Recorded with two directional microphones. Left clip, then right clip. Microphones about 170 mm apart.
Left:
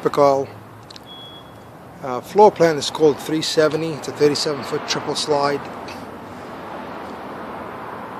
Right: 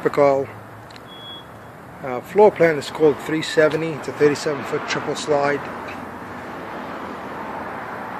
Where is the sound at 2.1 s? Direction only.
20° left (ahead or behind).